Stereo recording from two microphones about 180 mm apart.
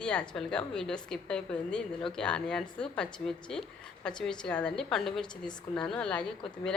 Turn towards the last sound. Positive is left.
turn(degrees=5)  # may be behind; listen again after turning